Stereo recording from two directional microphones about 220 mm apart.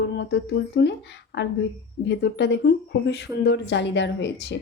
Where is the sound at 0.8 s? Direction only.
50° left (ahead or behind).